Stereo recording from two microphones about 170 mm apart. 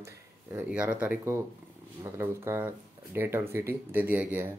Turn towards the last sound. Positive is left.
turn(degrees=-10)  # may be behind; listen again after turning